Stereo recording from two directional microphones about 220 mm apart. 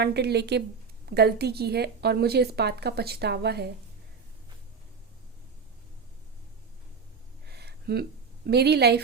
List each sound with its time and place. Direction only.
0.0 s a woman's voice: 50° right (ahead or behind)
7.4 s a sound: 45° right (ahead or behind)
8.4 s a woman's voice: 45° right (ahead or behind)